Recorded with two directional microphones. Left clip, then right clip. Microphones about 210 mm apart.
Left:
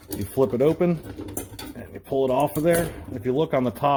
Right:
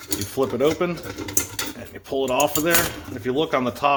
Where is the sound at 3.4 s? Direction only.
35° left (ahead or behind).